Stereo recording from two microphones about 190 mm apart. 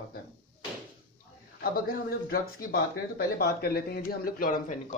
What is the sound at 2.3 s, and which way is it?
Speech, 50° left (ahead or behind).